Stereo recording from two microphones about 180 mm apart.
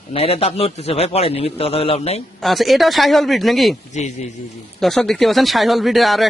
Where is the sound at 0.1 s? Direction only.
35° left (ahead or behind).